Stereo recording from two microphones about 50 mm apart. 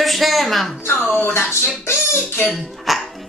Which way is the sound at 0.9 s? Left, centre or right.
Left.